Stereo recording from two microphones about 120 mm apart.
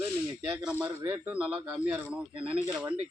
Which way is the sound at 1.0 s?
20° right (ahead or behind).